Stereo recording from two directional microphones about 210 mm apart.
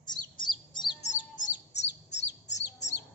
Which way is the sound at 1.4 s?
35° left (ahead or behind).